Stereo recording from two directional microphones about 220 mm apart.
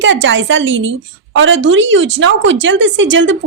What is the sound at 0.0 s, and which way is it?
A woman's voice, 60° right (ahead or behind).